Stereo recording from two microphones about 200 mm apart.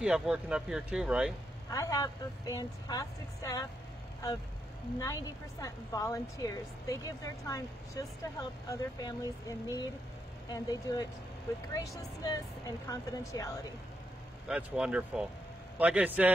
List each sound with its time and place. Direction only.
0.0 s speech: 5° right (ahead or behind)
1.7 s a woman's voice: 15° left (ahead or behind)
4.9 s a woman's voice: 15° left (ahead or behind)
14.5 s a man's voice: 5° right (ahead or behind)